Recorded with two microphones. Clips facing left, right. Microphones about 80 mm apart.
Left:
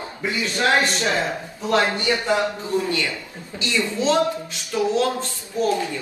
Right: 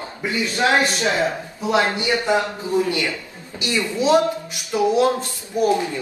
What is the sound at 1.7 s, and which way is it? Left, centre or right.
Speech, centre.